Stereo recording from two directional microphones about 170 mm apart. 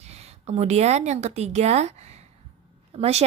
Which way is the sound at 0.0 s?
40° right (ahead or behind).